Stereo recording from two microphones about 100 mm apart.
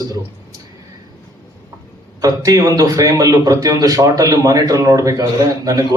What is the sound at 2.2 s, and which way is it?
Speech, 40° right (ahead or behind).